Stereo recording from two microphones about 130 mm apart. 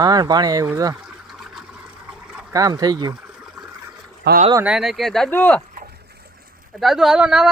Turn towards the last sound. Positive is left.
turn(degrees=-5)  # may be behind; listen again after turning